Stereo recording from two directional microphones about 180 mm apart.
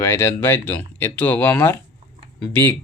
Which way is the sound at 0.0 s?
15° left (ahead or behind).